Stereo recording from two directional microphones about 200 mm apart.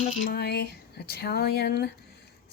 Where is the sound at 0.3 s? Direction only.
55° left (ahead or behind).